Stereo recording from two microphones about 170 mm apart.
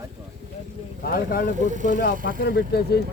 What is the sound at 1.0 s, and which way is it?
Vehicle, 60° left (ahead or behind).